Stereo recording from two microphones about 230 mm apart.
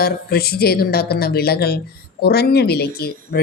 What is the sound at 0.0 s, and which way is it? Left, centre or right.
A woman's voice, left.